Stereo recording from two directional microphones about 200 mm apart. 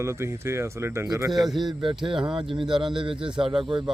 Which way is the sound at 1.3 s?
Centre (ahead or behind).